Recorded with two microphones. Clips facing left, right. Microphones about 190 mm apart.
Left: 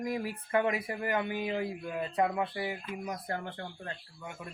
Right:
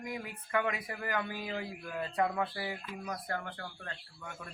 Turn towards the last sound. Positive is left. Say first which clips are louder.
# left 3 dB
turn(degrees=25)  # may be behind; listen again after turning